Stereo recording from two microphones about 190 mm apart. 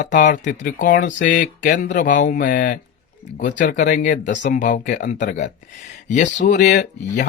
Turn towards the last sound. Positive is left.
turn(degrees=40)  # may be behind; listen again after turning